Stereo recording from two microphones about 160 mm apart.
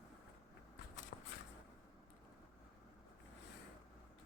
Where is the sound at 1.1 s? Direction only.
90° left.